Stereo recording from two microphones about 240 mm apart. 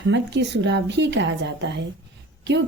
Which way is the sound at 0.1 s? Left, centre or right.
Right.